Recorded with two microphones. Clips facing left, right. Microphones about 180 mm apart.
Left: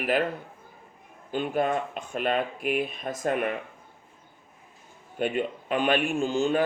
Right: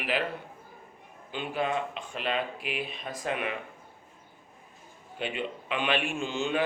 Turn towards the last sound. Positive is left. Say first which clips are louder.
# left 6 dB
turn(degrees=40)  # may be behind; listen again after turning